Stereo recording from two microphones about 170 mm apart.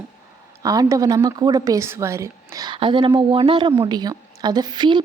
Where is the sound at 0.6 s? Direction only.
20° right (ahead or behind).